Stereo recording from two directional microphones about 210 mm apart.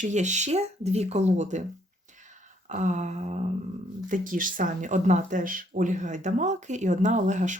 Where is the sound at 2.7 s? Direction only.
35° right (ahead or behind).